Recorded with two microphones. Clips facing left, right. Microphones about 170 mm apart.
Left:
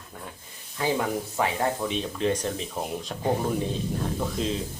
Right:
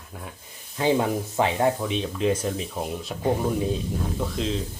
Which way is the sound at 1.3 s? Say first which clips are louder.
Right 4 dB; 20° right (ahead or behind).